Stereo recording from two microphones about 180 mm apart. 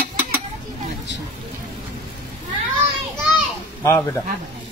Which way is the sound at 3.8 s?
15° left (ahead or behind).